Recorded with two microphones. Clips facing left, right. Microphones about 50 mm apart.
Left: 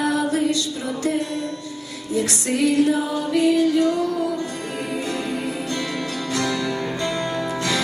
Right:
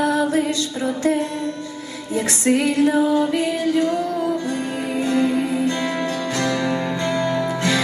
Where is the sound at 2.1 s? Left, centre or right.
Right.